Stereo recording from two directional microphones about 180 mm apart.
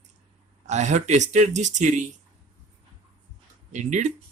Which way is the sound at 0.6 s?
40° right (ahead or behind).